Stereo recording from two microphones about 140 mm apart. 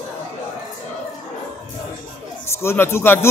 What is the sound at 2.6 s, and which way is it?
Speech, 20° left (ahead or behind).